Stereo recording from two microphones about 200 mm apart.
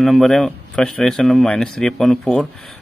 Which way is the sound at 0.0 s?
Centre (ahead or behind).